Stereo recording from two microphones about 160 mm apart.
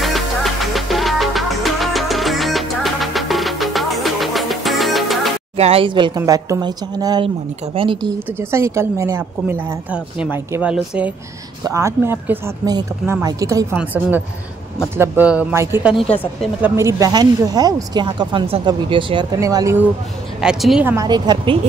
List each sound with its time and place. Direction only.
0.0 s music: centre (ahead or behind)
5.6 s speech: 35° right (ahead or behind)
8.4 s a woman's voice: 15° right (ahead or behind)
19.4 s speech: 20° right (ahead or behind)
20.3 s speech: 5° right (ahead or behind)
20.9 s speech: 25° right (ahead or behind)